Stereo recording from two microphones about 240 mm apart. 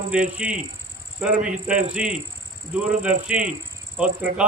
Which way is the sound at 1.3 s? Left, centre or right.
Right.